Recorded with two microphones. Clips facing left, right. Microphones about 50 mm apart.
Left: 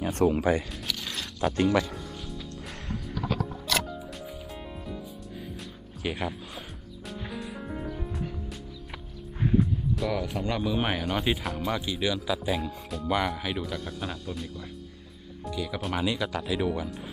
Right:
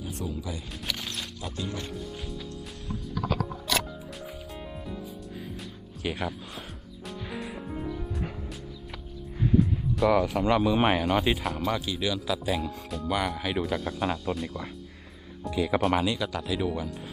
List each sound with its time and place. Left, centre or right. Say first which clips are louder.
0.0 s speech: left 11 dB; left
4.5 s music: even; centre
6.0 s speech: even; centre
7.3 s music: right 1 dB; centre
9.6 s music: right 4 dB; centre
10.4 s speech: right 5 dB; centre
11.8 s speech: left 1 dB; centre
16.3 s speech: left 1 dB; centre